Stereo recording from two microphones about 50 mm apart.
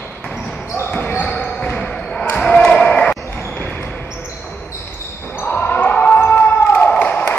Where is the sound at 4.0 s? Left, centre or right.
Left.